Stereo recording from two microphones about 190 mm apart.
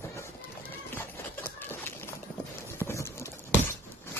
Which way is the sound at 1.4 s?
10° left (ahead or behind).